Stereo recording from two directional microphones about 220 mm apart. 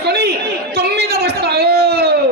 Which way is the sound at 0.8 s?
45° right (ahead or behind).